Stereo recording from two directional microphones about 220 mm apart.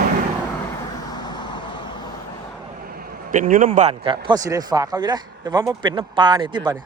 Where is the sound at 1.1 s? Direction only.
20° left (ahead or behind).